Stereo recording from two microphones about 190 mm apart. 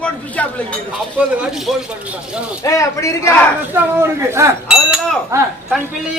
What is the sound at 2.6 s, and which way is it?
Speech, 15° left (ahead or behind).